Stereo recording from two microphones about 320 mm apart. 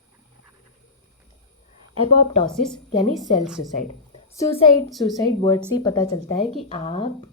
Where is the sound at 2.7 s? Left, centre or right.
Centre.